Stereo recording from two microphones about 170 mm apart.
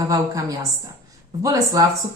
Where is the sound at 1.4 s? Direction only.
20° right (ahead or behind).